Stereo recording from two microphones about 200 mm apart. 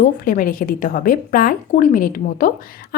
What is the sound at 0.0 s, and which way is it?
A woman's voice, 45° left (ahead or behind).